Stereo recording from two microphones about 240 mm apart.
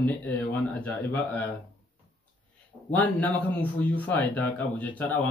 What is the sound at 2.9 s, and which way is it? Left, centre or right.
Speech, centre.